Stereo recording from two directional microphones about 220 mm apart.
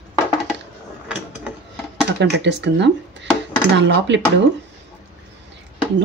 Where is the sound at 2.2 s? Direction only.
50° right (ahead or behind).